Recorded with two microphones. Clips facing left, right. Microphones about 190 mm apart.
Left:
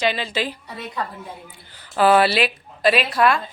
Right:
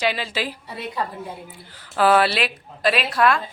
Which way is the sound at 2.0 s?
Centre (ahead or behind).